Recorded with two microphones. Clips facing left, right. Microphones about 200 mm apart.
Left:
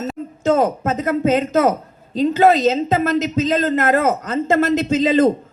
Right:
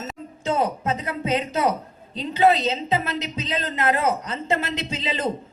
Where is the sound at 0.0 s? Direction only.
45° left (ahead or behind).